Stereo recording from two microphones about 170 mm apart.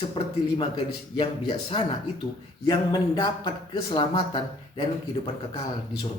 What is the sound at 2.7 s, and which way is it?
Speech, 25° left (ahead or behind).